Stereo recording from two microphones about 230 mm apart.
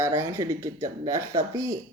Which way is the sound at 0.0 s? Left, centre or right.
Centre.